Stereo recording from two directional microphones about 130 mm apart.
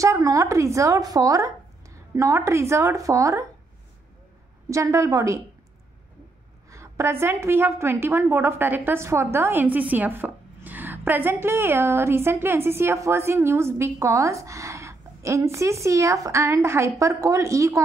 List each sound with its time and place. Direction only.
0.0 s a woman's voice: 25° right (ahead or behind)
4.6 s a woman's voice: 25° right (ahead or behind)
6.7 s a woman's voice: 20° right (ahead or behind)